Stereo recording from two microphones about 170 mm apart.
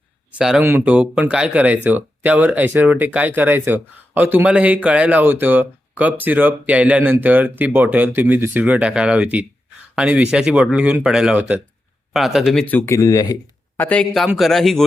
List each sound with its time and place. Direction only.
0.3 s a man's voice: 5° right (ahead or behind)